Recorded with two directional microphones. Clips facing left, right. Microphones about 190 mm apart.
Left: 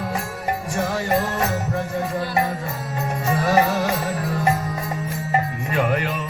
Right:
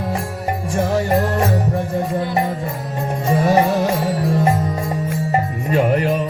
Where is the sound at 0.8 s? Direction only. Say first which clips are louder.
Right 8 dB; 30° right (ahead or behind).